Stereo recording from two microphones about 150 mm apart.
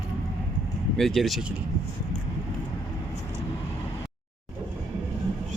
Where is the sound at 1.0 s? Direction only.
Centre (ahead or behind).